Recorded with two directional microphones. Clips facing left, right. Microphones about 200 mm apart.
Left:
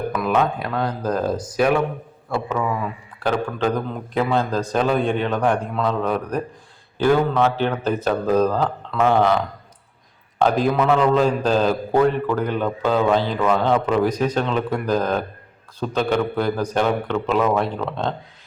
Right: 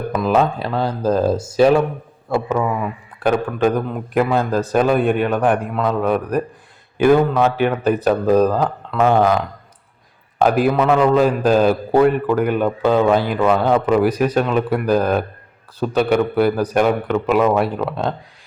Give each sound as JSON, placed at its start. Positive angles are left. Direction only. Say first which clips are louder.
{"t": 0.1, "sound": "speech", "louder": "right 5 dB", "side_deg": -25}
{"t": 3.2, "sound": "a man's voice", "louder": "right 4 dB", "side_deg": -10}